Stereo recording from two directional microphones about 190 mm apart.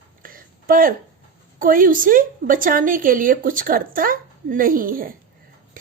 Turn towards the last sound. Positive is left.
turn(degrees=-50)  # may be behind; listen again after turning